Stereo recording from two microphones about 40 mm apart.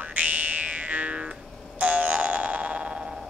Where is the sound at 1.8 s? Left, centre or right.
Right.